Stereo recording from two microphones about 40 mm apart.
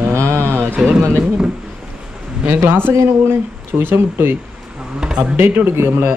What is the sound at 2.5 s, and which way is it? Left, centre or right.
Speech, right.